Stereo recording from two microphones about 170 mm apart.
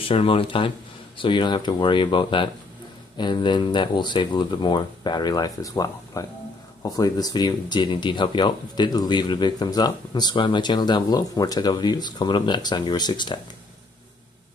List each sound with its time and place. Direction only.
0.0 s speech: 30° left (ahead or behind)